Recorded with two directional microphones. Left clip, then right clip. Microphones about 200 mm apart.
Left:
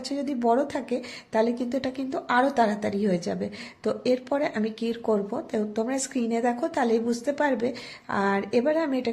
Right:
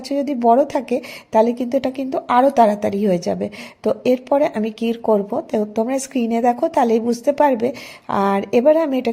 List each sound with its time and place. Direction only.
0.1 s a woman's voice: 30° right (ahead or behind)